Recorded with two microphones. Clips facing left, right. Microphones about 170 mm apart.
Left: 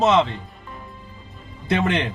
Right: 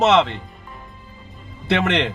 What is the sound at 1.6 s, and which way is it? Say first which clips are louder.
Speech: right 2 dB; 80° right.